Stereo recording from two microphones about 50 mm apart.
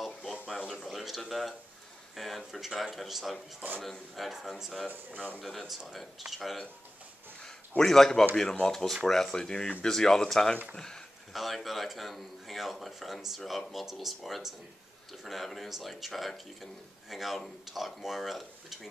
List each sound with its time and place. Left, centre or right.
0.0 s a sound: centre
0.9 s a man's voice: centre
4.8 s speech: right
5.7 s a man's voice: centre
7.8 s speech: centre
11.3 s a man's voice: centre